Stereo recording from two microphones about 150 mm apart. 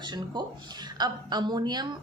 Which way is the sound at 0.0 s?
30° right (ahead or behind).